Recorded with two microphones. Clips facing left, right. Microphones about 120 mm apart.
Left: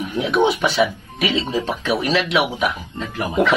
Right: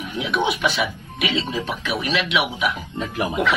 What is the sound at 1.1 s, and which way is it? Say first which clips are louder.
Speech: left 3 dB; 30° left (ahead or behind).